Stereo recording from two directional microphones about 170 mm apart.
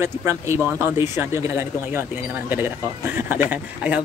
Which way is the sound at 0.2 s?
15° right (ahead or behind).